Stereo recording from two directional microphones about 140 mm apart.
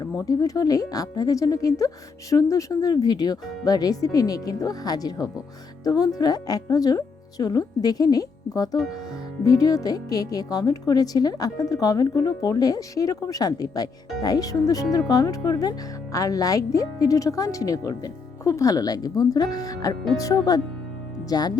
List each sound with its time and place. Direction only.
0.0 s a woman's voice: 25° left (ahead or behind)